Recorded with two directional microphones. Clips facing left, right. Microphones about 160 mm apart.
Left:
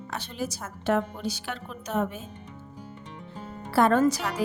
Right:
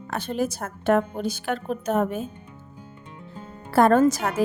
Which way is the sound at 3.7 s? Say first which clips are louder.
Right 4 dB; 45° right (ahead or behind).